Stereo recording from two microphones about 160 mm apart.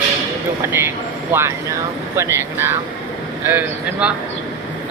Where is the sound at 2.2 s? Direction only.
15° right (ahead or behind).